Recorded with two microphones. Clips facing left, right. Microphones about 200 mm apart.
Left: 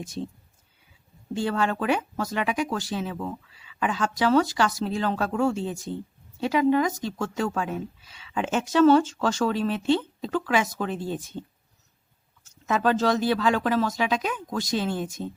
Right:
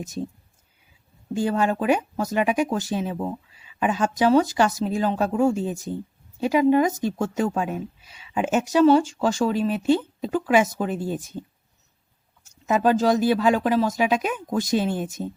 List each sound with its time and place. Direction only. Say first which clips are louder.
1.5 s a woman's voice: right 3 dB; 15° right (ahead or behind)
12.6 s a woman's voice: right 3 dB; 15° right (ahead or behind)